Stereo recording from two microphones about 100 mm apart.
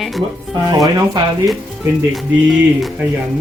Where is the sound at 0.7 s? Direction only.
45° right (ahead or behind).